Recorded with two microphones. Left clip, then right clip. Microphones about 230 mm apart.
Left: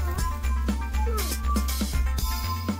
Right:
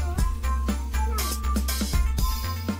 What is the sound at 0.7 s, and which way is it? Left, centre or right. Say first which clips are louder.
Music: even; centre.